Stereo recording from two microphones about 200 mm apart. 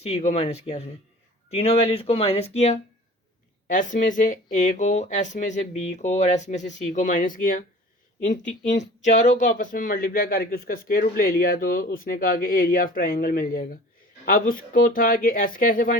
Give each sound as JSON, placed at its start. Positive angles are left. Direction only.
{"t": 0.0, "sound": "speech", "side_deg": 35}
{"t": 9.0, "sound": "speech", "side_deg": 40}